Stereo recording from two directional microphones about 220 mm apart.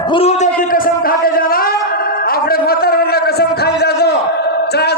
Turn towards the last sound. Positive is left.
turn(degrees=50)  # may be behind; listen again after turning